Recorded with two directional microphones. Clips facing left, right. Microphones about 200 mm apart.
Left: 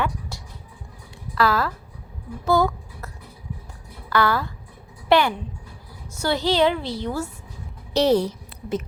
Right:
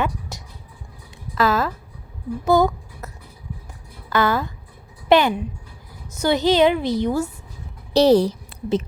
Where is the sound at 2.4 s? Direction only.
20° right (ahead or behind).